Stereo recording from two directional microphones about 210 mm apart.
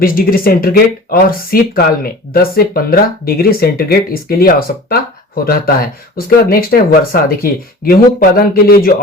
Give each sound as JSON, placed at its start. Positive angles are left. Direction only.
{"t": 0.0, "sound": "speech", "side_deg": 45}